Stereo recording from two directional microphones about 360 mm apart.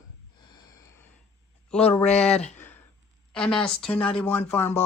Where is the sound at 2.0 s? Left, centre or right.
Centre.